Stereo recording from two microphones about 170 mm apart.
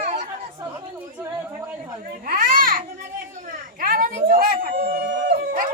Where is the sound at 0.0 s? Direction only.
50° right (ahead or behind).